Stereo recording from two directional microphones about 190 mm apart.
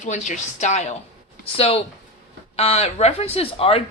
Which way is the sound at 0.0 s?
40° left (ahead or behind).